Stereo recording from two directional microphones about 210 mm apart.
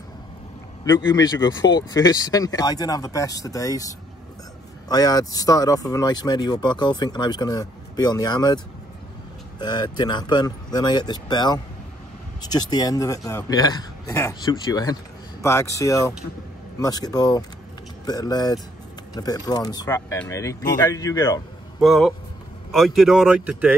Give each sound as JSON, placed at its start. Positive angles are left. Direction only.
{"t": 0.8, "sound": "speech", "side_deg": 15}
{"t": 9.6, "sound": "speech", "side_deg": 20}
{"t": 21.7, "sound": "speech", "side_deg": 0}